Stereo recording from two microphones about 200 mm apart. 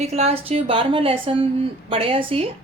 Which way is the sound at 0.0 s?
30° right (ahead or behind).